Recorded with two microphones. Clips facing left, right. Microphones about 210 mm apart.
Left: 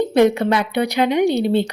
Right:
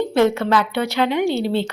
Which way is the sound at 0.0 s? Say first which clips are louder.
Left 2 dB; 15° left (ahead or behind).